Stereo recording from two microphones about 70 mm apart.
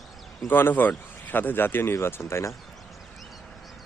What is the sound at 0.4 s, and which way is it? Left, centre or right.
Speech, left.